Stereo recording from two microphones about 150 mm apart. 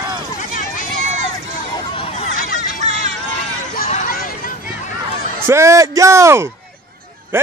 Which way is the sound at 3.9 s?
65° left (ahead or behind).